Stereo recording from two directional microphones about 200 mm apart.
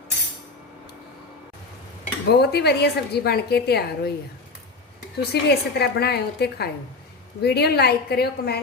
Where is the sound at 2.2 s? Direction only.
55° left (ahead or behind).